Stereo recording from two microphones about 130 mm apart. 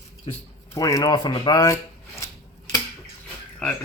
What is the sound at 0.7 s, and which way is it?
Speech, 25° left (ahead or behind).